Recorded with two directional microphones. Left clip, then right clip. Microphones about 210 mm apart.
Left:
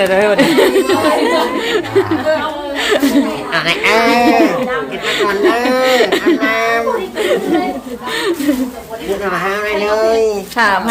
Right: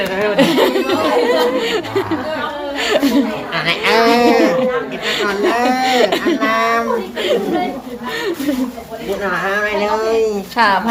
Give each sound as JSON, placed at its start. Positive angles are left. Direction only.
{"t": 0.1, "sound": "speech", "side_deg": 50}
{"t": 0.3, "sound": "speech", "side_deg": 5}
{"t": 9.2, "sound": "a woman's voice", "side_deg": 5}